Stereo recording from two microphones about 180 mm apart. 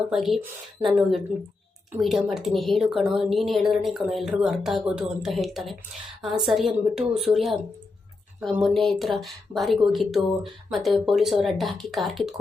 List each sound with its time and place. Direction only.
0.1 s a woman's voice: centre (ahead or behind)
8.6 s a woman's voice: centre (ahead or behind)